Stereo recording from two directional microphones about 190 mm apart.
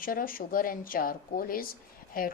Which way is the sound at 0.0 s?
50° left (ahead or behind).